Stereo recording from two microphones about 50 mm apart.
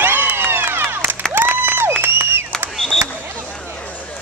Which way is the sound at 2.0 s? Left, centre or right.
Right.